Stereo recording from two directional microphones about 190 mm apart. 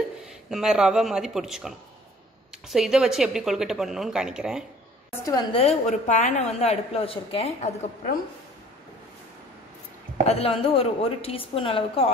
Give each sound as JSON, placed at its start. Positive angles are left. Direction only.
{"t": 0.5, "sound": "a woman's voice", "side_deg": -5}
{"t": 5.2, "sound": "a woman's voice", "side_deg": 20}
{"t": 10.2, "sound": "a woman's voice", "side_deg": 30}